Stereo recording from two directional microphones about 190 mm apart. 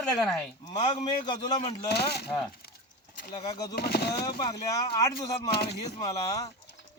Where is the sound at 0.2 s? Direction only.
5° left (ahead or behind).